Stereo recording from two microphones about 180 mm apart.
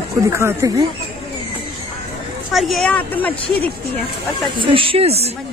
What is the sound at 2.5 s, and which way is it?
Speech, centre (ahead or behind).